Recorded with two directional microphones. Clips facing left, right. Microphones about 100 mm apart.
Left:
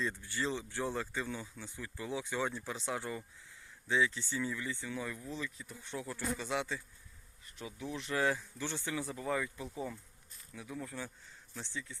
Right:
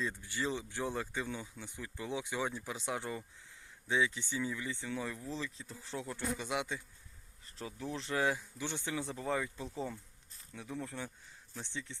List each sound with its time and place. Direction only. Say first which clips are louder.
0.0 s speech: left 1 dB; 15° right (ahead or behind)
7.4 s speech: right 1 dB; 35° right (ahead or behind)
8.2 s speech: left 1 dB; 20° right (ahead or behind)
9.7 s bee: right 1 dB; 30° right (ahead or behind)
11.6 s speech: even; 25° right (ahead or behind)